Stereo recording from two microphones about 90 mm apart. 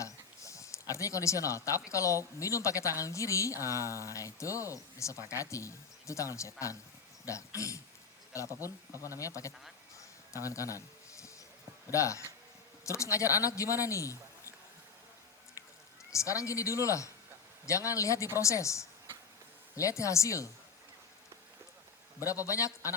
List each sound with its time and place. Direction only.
0.0 s a sound: 35° left (ahead or behind)
1.9 s a woman's voice: 35° left (ahead or behind)
10.0 s a sound: 35° left (ahead or behind)
11.9 s a woman's voice: 35° left (ahead or behind)
16.0 s a woman's voice: 35° left (ahead or behind)
22.2 s a woman's voice: 35° left (ahead or behind)